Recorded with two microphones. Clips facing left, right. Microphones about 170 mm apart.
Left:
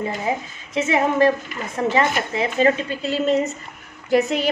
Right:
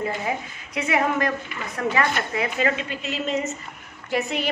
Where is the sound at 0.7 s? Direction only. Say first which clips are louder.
Left 4 dB; 25° left (ahead or behind).